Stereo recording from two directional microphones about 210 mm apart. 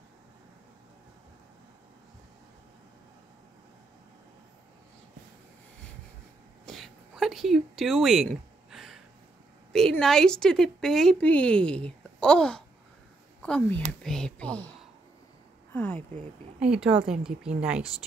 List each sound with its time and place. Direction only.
6.6 s a sound: centre (ahead or behind)
9.7 s a woman's voice: centre (ahead or behind)
15.7 s speech: 10° left (ahead or behind)
16.5 s a woman's voice: 5° right (ahead or behind)
16.9 s speech: 25° right (ahead or behind)
17.6 s a woman's voice: 5° right (ahead or behind)